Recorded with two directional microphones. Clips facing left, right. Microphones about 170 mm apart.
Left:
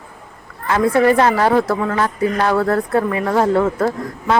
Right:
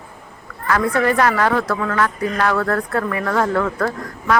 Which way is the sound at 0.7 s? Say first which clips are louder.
Left 4 dB; 25° left (ahead or behind).